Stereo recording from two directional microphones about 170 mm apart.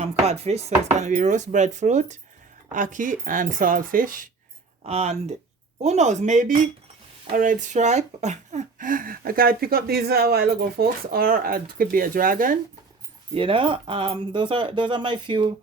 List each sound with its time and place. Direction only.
0.0 s chopping: 40° right (ahead or behind)
0.9 s speech: 45° right (ahead or behind)
4.8 s speech: 40° right (ahead or behind); by 12.5 s 55° right (ahead or behind)
13.3 s speech: 30° right (ahead or behind)